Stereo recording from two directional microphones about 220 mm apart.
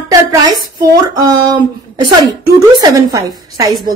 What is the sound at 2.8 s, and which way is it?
Speech, 15° right (ahead or behind).